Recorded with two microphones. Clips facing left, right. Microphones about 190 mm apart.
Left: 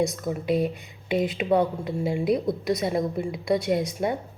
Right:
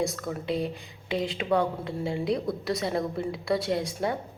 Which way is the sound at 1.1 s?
20° left (ahead or behind).